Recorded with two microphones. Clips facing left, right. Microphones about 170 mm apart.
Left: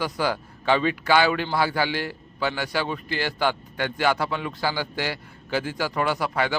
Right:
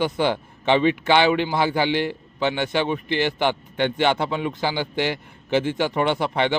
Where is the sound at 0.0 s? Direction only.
25° right (ahead or behind).